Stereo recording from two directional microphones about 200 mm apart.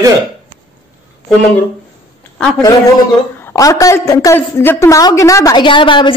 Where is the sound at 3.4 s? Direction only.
15° left (ahead or behind).